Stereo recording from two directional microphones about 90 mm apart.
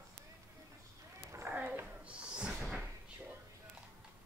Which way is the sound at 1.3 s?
30° right (ahead or behind).